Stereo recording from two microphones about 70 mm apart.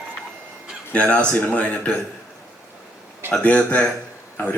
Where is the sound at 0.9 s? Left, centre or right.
Centre.